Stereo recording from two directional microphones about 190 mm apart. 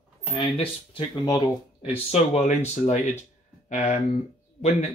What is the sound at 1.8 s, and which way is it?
Speech, 35° left (ahead or behind).